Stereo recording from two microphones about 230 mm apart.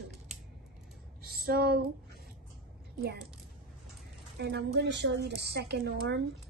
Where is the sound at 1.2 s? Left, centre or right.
Right.